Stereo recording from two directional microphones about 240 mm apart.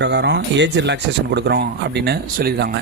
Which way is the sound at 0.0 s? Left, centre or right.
Right.